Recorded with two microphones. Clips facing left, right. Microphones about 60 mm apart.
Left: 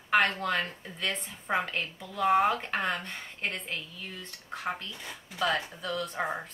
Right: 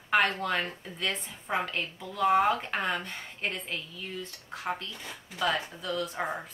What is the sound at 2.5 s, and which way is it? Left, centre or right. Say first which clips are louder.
Speech: even; centre.